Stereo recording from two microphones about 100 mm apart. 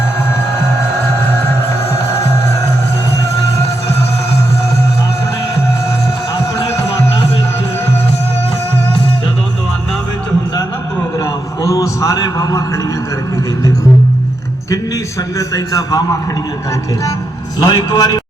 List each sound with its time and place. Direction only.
11.2 s a sound: 35° left (ahead or behind)
15.4 s a man's voice: 35° left (ahead or behind)
17.6 s a man's voice: 45° left (ahead or behind)